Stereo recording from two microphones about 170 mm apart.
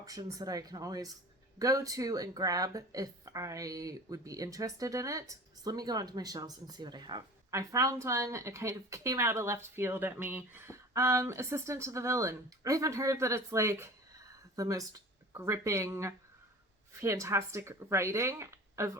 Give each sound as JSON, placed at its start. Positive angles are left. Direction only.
{"t": 0.0, "sound": "speech", "side_deg": -20}